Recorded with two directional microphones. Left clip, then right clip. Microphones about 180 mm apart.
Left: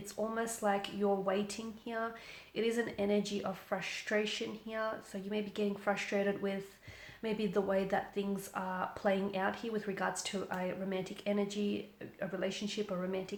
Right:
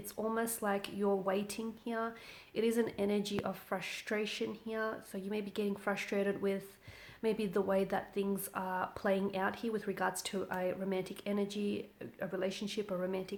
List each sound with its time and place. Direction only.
0.3 s speech: 45° right (ahead or behind)